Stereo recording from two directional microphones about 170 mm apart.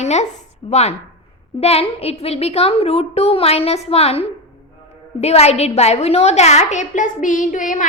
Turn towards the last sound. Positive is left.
turn(degrees=50)  # may be behind; listen again after turning